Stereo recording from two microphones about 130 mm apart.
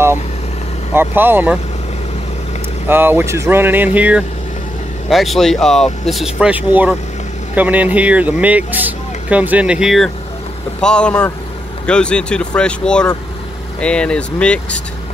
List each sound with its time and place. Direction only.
0.9 s speech: 15° right (ahead or behind)
2.9 s speech: 15° right (ahead or behind)
5.1 s speech: centre (ahead or behind)